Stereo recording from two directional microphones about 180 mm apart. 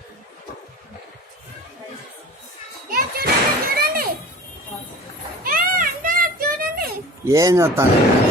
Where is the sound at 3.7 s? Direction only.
55° right (ahead or behind).